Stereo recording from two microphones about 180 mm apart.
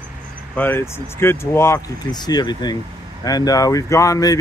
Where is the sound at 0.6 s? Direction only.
10° left (ahead or behind).